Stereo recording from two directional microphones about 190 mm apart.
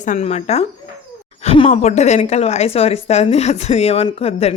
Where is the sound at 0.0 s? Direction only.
40° left (ahead or behind).